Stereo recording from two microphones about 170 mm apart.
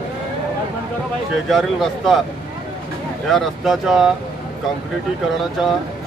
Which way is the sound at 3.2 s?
Centre (ahead or behind).